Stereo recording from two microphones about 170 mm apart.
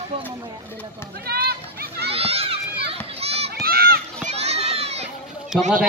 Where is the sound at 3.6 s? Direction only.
65° right (ahead or behind).